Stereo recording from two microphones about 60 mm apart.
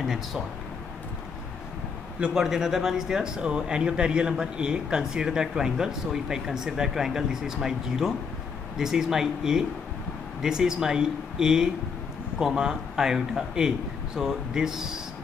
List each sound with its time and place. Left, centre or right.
0.0 s speech: centre
2.1 s a man's voice: centre
2.4 s speech: centre